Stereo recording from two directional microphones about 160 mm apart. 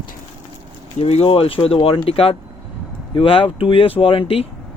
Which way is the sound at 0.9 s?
40° left (ahead or behind).